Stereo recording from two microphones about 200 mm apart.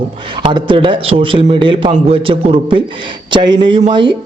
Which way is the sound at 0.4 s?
25° right (ahead or behind).